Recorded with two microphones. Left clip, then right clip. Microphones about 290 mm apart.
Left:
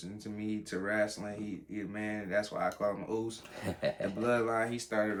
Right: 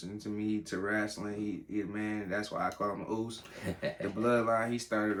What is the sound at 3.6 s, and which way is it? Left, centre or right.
Speech, centre.